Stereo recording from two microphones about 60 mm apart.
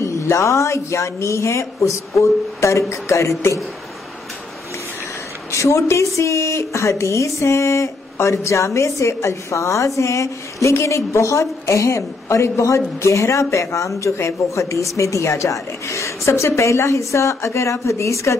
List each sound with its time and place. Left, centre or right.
0.0 s speech: left
5.5 s speech: left